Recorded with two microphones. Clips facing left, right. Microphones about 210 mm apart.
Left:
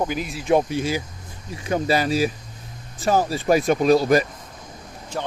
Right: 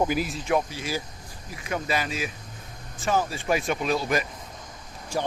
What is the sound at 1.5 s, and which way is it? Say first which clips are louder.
Speech: left 7 dB; 30° left (ahead or behind).